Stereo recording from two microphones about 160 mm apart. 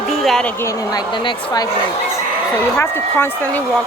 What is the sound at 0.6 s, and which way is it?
Speech, 25° left (ahead or behind).